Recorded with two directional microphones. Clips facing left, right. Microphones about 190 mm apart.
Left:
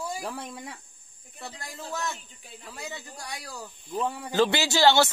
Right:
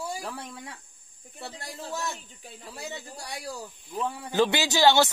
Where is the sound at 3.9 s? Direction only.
15° left (ahead or behind).